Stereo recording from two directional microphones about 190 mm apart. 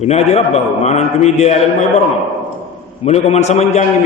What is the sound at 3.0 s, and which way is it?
Speech, 35° left (ahead or behind).